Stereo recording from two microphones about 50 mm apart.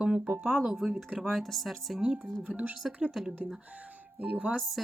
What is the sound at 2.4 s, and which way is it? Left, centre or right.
Speech, right.